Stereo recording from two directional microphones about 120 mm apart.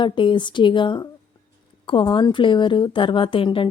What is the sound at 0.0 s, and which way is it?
A woman's voice, 40° left (ahead or behind).